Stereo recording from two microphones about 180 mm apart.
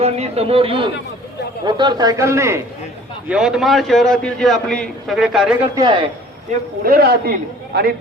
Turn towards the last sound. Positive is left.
turn(degrees=-60)  # may be behind; listen again after turning